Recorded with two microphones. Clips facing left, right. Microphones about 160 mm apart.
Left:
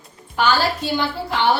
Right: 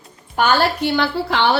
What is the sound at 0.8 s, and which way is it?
Speech, 75° right (ahead or behind).